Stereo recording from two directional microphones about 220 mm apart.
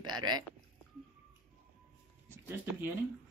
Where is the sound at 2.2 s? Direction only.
10° right (ahead or behind).